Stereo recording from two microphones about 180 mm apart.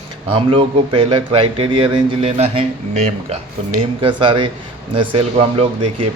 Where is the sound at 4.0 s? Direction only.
30° right (ahead or behind).